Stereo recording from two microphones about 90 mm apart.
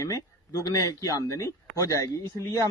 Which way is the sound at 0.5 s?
40° left (ahead or behind).